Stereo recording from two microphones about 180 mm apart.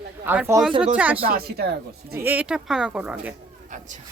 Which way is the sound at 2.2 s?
10° right (ahead or behind).